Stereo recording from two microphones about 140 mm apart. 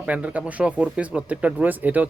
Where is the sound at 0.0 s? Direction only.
10° right (ahead or behind).